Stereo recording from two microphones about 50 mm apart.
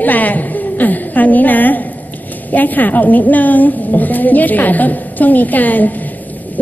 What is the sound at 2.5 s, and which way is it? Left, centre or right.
A woman's voice, left.